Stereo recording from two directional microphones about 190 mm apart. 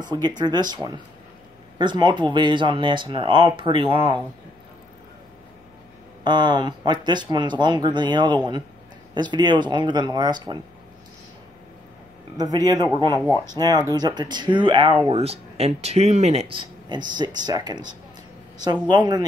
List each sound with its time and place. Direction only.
0.0 s speech: 20° right (ahead or behind)
1.8 s speech: 25° right (ahead or behind)
6.2 s speech: 25° right (ahead or behind)
12.4 s speech: 20° right (ahead or behind)